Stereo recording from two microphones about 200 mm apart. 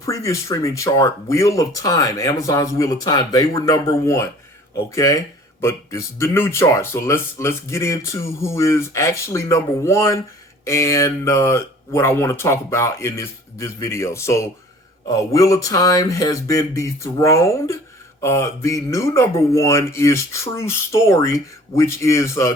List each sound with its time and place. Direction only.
0.0 s speech: 15° left (ahead or behind)